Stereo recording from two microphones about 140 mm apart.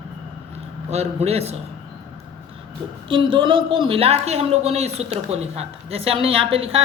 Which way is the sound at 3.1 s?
35° right (ahead or behind).